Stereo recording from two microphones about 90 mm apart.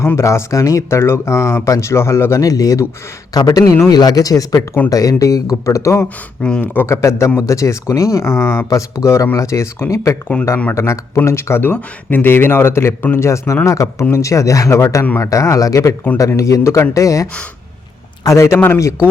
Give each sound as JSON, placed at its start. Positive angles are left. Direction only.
{"t": 0.2, "sound": "speech", "side_deg": 35}
{"t": 6.4, "sound": "speech", "side_deg": 10}
{"t": 6.7, "sound": "speech", "side_deg": 30}